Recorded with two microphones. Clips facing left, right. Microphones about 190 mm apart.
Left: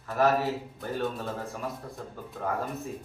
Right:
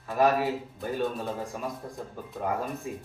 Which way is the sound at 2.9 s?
15° right (ahead or behind).